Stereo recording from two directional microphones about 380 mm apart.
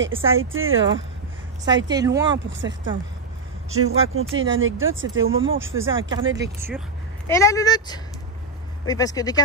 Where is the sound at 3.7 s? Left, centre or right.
Right.